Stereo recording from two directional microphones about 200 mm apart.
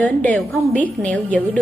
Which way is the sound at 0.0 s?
5° left (ahead or behind).